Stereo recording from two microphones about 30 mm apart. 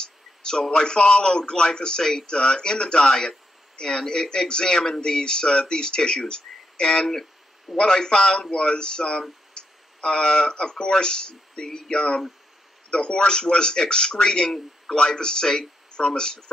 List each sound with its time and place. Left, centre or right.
0.4 s a sound: left
0.7 s speech: left
6.9 s speech: centre
7.7 s speech: left
9.5 s a sound: left
10.5 s speech: left